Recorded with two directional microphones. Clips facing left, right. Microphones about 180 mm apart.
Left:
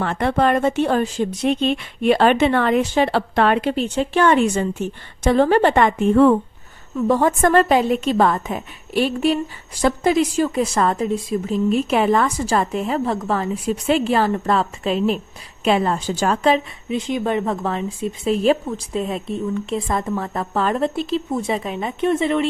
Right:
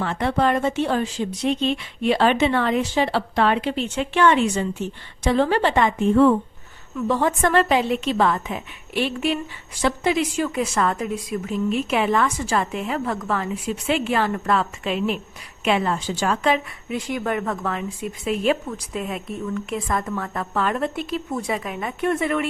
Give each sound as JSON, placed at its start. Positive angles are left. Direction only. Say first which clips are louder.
{"t": 0.0, "sound": "speech", "louder": "left 3 dB", "side_deg": 55}
{"t": 6.9, "sound": "a woman's voice", "louder": "left 4 dB", "side_deg": 45}
{"t": 16.9, "sound": "a woman's voice", "louder": "left 4 dB", "side_deg": 20}